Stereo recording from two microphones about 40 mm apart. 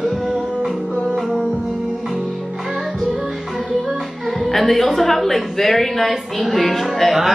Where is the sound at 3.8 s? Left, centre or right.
Centre.